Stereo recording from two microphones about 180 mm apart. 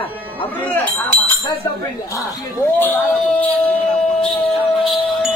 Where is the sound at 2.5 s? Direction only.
10° left (ahead or behind).